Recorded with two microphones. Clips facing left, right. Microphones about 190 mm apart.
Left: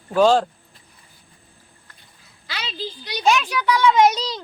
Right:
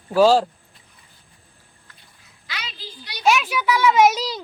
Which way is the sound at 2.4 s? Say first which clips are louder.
Left 3 dB; 30° left (ahead or behind).